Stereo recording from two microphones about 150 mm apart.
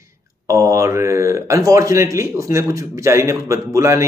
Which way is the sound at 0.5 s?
20° right (ahead or behind).